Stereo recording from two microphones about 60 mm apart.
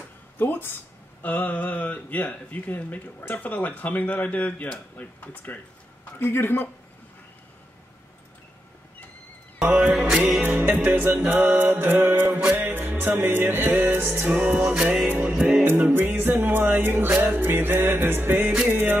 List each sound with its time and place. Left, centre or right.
0.4 s speech: left
6.1 s speech: left
9.7 s music: centre
10.4 s music: right
14.3 s music: right